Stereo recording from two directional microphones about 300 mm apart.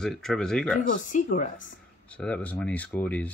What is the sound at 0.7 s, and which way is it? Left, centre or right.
Speech, left.